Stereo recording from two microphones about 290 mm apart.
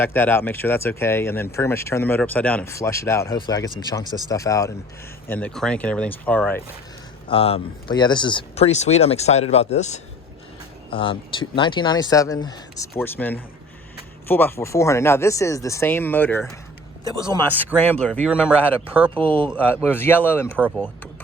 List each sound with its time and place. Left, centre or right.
0.0 s speech: centre
7.3 s speech: centre
17.7 s speech: centre
20.6 s speech: centre